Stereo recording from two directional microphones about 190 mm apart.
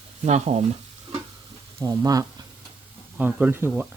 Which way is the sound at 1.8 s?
15° right (ahead or behind).